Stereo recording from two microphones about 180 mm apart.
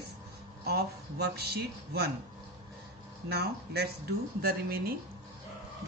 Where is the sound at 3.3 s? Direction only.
65° right (ahead or behind).